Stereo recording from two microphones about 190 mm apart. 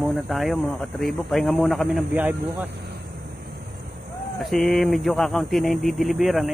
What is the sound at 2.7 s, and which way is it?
Vehicle, 60° right (ahead or behind).